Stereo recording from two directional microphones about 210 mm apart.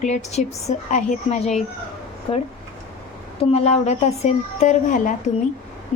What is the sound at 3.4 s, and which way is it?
A woman's voice, 30° left (ahead or behind).